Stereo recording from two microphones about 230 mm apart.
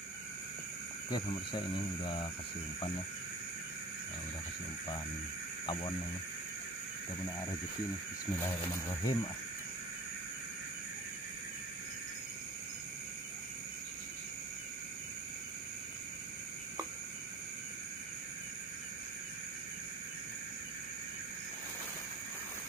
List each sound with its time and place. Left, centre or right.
1.1 s speech: left
5.7 s speech: left
8.4 s speech: centre